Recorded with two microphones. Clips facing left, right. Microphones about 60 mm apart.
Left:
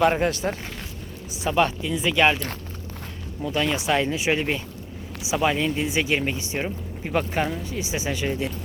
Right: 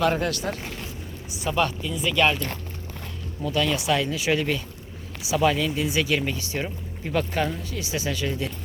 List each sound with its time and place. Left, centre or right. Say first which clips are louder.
0.0 s speech: left 3 dB; left
3.4 s speech: even; left